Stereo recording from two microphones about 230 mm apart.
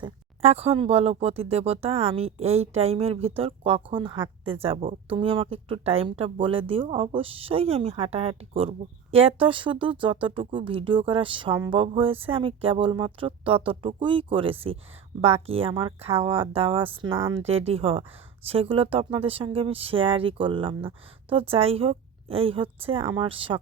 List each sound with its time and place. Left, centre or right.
0.0 s speech: right